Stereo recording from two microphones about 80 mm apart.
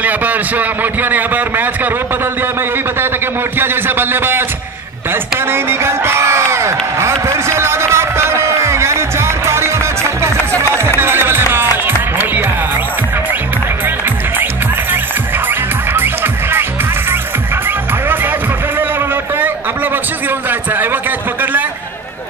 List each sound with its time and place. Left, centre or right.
0.0 s a man's voice: right
3.5 s a man's voice: right
5.5 s a sound: right
9.5 s music: right